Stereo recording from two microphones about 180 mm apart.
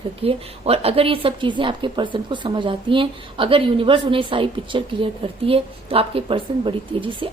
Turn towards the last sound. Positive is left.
turn(degrees=-30)  # may be behind; listen again after turning